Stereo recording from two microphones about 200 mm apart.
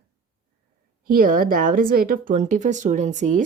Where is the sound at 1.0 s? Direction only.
45° right (ahead or behind).